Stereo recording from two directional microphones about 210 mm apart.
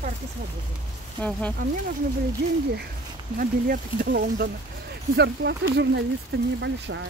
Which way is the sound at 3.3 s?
40° right (ahead or behind).